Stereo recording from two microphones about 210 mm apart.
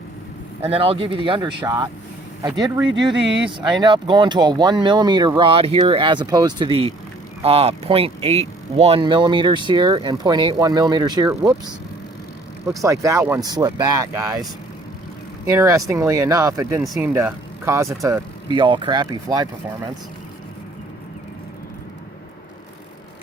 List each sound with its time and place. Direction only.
0.6 s speech: 25° right (ahead or behind)
12.8 s speech: 15° right (ahead or behind)
15.4 s speech: 15° right (ahead or behind)
16.8 s speech: centre (ahead or behind)
17.2 s speech: 15° right (ahead or behind)